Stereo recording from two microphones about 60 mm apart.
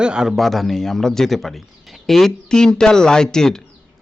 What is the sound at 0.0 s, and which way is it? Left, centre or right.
Speech, centre.